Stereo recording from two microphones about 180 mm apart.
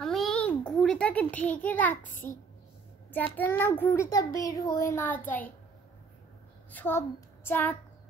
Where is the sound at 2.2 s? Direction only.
10° left (ahead or behind).